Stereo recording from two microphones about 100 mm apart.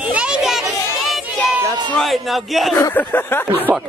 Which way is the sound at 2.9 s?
20° left (ahead or behind).